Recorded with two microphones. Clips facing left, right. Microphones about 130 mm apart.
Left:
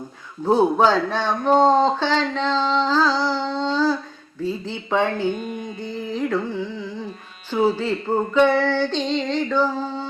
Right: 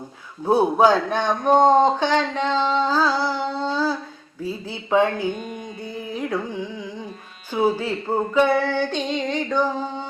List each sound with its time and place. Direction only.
0.4 s speech: 10° right (ahead or behind)